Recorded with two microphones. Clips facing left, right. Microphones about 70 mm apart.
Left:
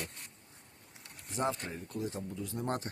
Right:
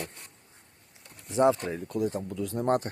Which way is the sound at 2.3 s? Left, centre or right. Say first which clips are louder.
Right 11 dB; right.